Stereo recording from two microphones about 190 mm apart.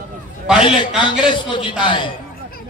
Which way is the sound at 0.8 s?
25° left (ahead or behind).